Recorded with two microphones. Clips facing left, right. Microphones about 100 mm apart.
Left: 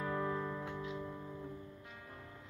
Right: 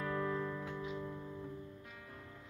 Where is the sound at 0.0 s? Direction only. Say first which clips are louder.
Even; 15° left (ahead or behind).